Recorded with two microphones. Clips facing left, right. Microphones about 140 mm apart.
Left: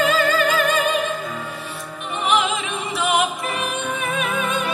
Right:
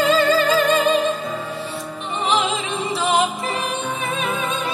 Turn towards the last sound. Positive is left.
turn(degrees=-30)  # may be behind; listen again after turning